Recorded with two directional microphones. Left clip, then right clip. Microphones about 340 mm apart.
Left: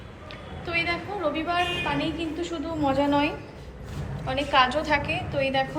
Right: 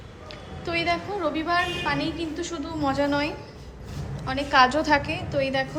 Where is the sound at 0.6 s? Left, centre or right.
Centre.